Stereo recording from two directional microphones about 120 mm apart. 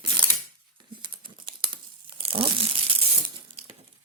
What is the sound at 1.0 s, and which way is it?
Crumpling, 45° right (ahead or behind).